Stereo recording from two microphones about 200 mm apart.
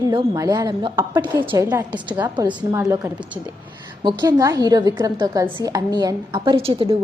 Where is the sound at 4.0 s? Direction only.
20° right (ahead or behind).